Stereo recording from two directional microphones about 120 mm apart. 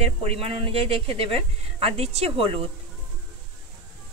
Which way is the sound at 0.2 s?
55° right (ahead or behind).